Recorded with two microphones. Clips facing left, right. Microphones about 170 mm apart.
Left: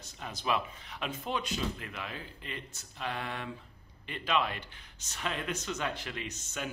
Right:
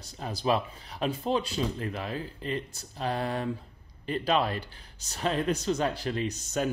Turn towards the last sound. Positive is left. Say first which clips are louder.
# right 10 dB
turn(degrees=-40)  # may be behind; listen again after turning